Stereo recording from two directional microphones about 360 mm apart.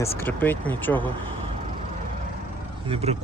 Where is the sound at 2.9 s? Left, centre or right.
Centre.